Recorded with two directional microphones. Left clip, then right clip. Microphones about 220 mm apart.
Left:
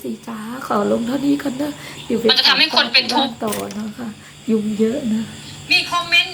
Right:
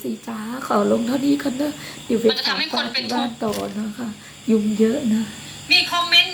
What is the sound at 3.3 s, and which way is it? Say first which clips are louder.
Speech: left 1 dB; 5° left (ahead or behind).